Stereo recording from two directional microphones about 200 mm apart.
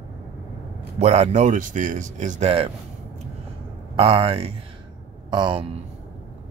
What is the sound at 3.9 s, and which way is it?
Speech, 30° right (ahead or behind).